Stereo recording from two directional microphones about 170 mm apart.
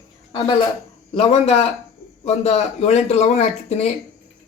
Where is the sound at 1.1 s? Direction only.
40° left (ahead or behind).